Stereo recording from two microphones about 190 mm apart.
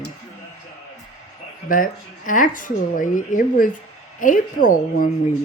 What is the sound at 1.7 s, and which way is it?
Speech, 45° left (ahead or behind).